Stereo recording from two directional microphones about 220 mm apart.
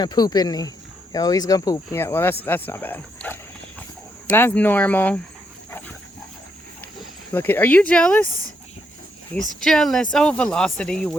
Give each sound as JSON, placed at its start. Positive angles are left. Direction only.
{"t": 0.0, "sound": "speech", "side_deg": 20}
{"t": 6.8, "sound": "speech", "side_deg": 10}
{"t": 9.6, "sound": "speech", "side_deg": 0}